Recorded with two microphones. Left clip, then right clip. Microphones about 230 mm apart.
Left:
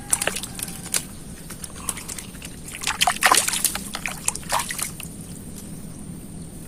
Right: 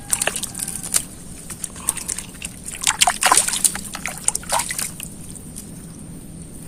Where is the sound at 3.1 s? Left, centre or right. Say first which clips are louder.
Even; right.